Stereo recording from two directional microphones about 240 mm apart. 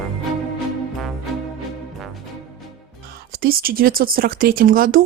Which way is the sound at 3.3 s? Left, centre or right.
Right.